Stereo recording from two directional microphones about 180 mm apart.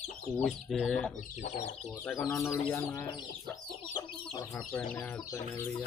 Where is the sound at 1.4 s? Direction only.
40° left (ahead or behind).